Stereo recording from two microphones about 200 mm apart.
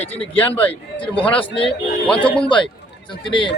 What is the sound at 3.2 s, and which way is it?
Speech, 25° left (ahead or behind).